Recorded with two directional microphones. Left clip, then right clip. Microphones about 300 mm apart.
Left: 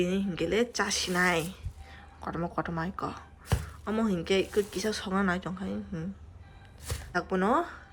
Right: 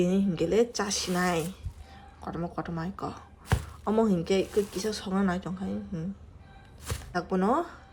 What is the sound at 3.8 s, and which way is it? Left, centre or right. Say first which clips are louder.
Speech: right 5 dB; centre.